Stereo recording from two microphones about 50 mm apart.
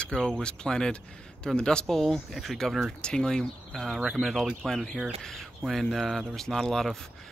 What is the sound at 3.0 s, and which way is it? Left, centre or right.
Speech, centre.